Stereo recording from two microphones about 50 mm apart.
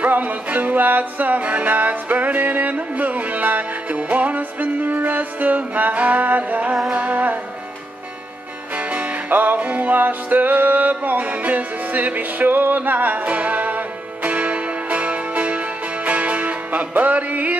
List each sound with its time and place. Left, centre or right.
0.0 s music: right
8.7 s music: right